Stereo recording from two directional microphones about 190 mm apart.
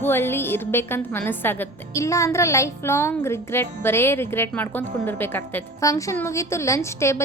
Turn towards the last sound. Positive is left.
turn(degrees=15)  # may be behind; listen again after turning